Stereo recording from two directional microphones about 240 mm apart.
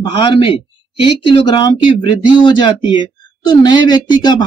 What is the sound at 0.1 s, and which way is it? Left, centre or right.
Speech, centre.